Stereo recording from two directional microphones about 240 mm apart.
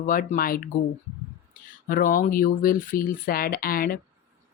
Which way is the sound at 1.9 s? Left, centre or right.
Left.